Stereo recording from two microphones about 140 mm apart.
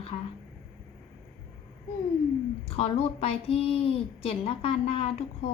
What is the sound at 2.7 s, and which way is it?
A woman's voice, 50° left (ahead or behind).